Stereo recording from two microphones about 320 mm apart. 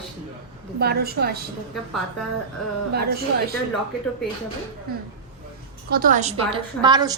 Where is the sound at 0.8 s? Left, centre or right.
Right.